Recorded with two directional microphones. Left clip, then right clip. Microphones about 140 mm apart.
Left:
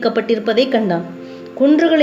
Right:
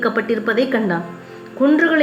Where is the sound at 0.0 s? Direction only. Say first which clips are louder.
Left 2 dB; 15° left (ahead or behind).